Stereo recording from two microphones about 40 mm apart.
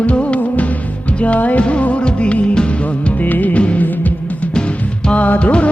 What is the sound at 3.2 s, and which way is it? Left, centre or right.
Music, left.